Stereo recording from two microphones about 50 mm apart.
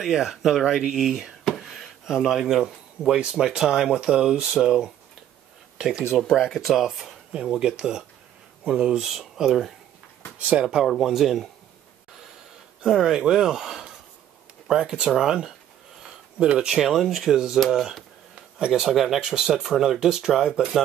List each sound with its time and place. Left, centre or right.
0.0 s speech: centre
1.4 s a sound: centre
3.2 s speech: centre
7.3 s speech: centre
9.0 s speech: centre
10.4 s speech: right
10.9 s speech: centre
12.8 s speech: centre
16.5 s speech: centre
16.9 s speech: centre